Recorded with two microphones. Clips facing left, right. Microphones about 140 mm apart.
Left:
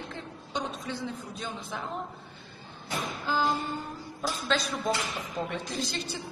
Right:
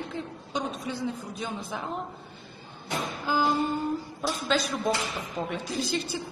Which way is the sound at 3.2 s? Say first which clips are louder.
Right 2 dB; 10° right (ahead or behind).